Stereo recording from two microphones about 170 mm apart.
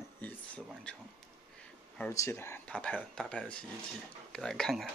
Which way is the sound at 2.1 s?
15° left (ahead or behind).